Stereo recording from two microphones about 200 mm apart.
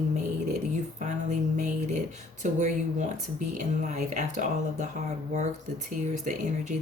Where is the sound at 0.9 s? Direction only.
40° right (ahead or behind).